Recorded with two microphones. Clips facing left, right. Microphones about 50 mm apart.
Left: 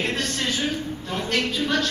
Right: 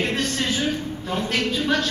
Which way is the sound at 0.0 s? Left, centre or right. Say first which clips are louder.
Right 2 dB; centre.